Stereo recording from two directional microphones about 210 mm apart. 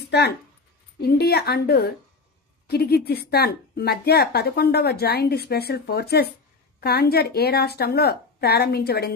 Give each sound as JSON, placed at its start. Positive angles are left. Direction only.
{"t": 0.9, "sound": "speech", "side_deg": 50}